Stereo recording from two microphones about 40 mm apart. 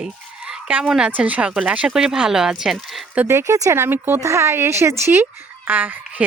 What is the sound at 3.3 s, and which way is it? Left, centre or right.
Speech, right.